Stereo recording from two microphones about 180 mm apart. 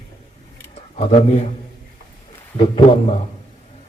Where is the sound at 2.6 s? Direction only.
30° left (ahead or behind).